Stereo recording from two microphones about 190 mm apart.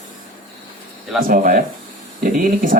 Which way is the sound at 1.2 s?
45° right (ahead or behind).